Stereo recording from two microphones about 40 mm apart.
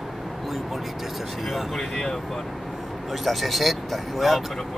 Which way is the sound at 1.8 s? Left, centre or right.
Centre.